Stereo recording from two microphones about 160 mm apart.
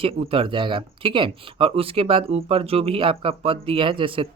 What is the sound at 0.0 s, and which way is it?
Speech, 35° right (ahead or behind).